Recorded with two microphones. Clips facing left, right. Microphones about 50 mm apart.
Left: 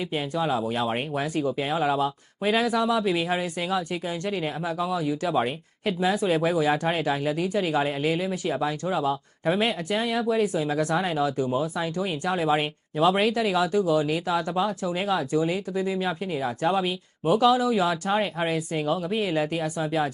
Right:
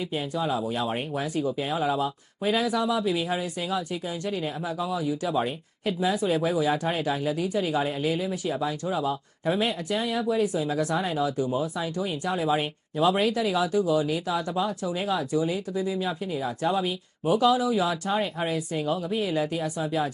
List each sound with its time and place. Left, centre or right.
0.1 s speech: left